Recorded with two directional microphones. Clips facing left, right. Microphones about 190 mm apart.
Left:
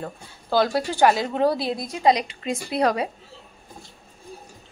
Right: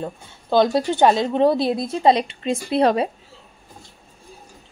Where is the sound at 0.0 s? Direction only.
20° right (ahead or behind).